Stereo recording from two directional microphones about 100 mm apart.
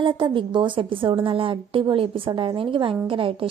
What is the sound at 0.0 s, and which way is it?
A woman's voice, 55° right (ahead or behind).